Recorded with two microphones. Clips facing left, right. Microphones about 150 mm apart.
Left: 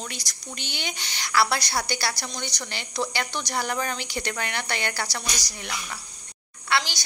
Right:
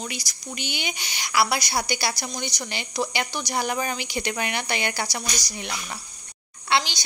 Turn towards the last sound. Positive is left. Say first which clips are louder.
# right 2 dB
turn(degrees=-20)  # may be behind; listen again after turning